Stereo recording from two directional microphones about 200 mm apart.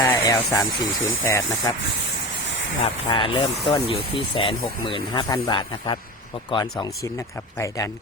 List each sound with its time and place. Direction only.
0.0 s speech: 20° left (ahead or behind)
2.8 s speech: 25° left (ahead or behind)